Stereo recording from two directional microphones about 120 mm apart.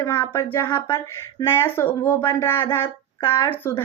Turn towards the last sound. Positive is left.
turn(degrees=15)  # may be behind; listen again after turning